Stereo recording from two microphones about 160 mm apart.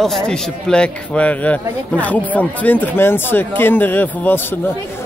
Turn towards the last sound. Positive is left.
turn(degrees=15)  # may be behind; listen again after turning